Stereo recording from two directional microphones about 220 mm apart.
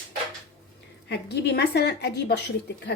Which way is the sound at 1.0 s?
50° left (ahead or behind).